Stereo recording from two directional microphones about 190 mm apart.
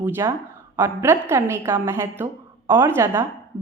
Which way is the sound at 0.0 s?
15° right (ahead or behind).